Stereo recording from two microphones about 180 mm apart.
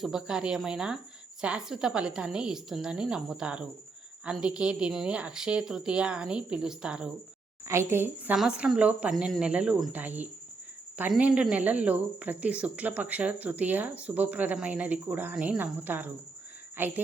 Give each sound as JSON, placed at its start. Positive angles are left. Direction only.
{"t": 0.0, "sound": "a woman's voice", "side_deg": -5}